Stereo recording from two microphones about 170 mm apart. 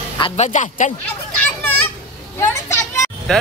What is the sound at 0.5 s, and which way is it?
Speech, 45° left (ahead or behind).